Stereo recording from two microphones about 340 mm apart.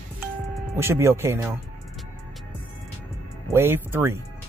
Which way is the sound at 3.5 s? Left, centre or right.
Centre.